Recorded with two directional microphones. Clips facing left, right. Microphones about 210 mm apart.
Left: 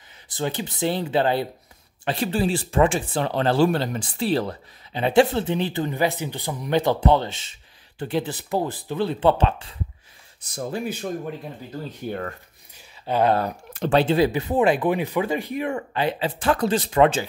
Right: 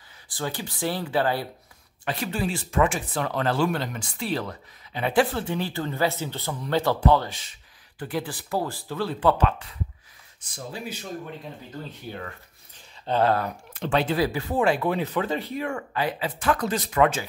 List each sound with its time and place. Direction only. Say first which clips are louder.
0.3 s speech: left 4 dB; 20° left (ahead or behind)
10.5 s speech: left 7 dB; 50° left (ahead or behind)
12.7 s a sound: left 1 dB; 10° left (ahead or behind)
13.7 s speech: left 5 dB; 40° left (ahead or behind)
14.0 s speech: left 5 dB; 25° left (ahead or behind)